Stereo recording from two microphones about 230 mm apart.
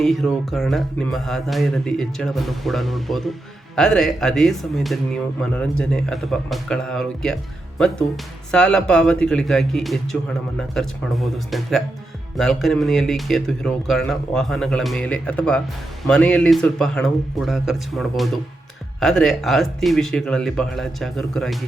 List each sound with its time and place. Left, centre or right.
0.0 s speech: centre